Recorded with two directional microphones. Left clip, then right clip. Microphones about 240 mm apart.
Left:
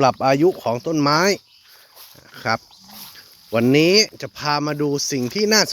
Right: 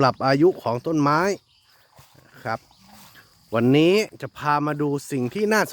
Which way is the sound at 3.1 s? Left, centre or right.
Centre.